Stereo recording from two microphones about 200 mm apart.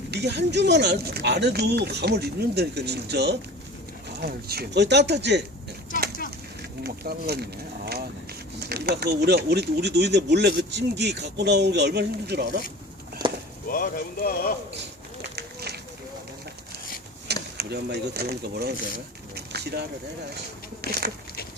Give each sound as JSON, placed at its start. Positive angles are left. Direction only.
{"t": 0.1, "sound": "speech", "side_deg": -55}
{"t": 6.6, "sound": "speech", "side_deg": -50}
{"t": 8.5, "sound": "speech", "side_deg": -50}
{"t": 13.2, "sound": "a sound", "side_deg": -25}
{"t": 13.7, "sound": "speech", "side_deg": 45}
{"t": 15.4, "sound": "run", "side_deg": -55}
{"t": 17.6, "sound": "speech", "side_deg": -55}
{"t": 20.8, "sound": "a sound", "side_deg": -50}